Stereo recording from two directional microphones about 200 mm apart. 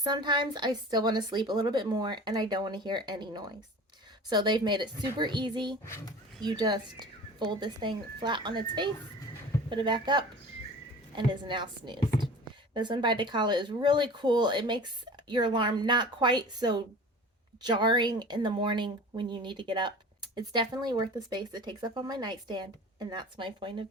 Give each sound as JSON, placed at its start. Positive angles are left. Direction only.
{"t": 0.0, "sound": "speech", "side_deg": -20}
{"t": 5.8, "sound": "speech", "side_deg": 15}
{"t": 6.4, "sound": "speech", "side_deg": -20}